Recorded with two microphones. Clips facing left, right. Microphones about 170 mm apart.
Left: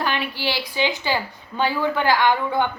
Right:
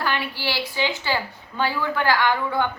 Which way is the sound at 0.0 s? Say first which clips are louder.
Left 2 dB; 20° left (ahead or behind).